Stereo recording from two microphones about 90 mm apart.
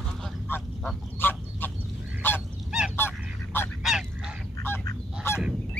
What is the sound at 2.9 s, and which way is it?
Goose, 25° left (ahead or behind).